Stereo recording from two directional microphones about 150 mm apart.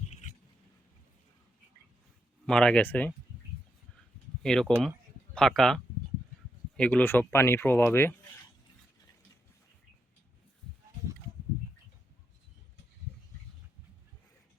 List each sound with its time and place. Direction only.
0.1 s a sound: 50° left (ahead or behind)
2.5 s speech: 5° left (ahead or behind)
4.4 s speech: 5° left (ahead or behind)